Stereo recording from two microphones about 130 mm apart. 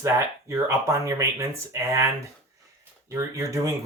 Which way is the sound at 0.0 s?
20° right (ahead or behind).